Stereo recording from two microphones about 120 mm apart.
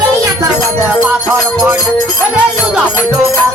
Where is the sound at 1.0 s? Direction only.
10° right (ahead or behind).